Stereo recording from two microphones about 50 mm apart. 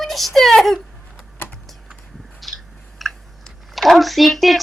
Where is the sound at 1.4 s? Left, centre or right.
Left.